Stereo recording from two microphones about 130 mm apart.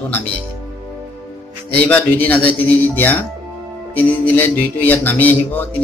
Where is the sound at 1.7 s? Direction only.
15° left (ahead or behind).